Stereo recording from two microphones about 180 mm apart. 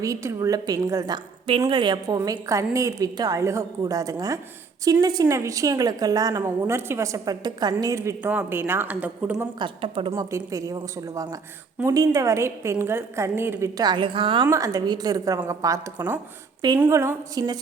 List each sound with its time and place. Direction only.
0.0 s a woman's voice: 15° right (ahead or behind)
9.6 s a woman's voice: 30° right (ahead or behind)
10.2 s a woman's voice: 15° right (ahead or behind)
14.4 s a woman's voice: 20° right (ahead or behind)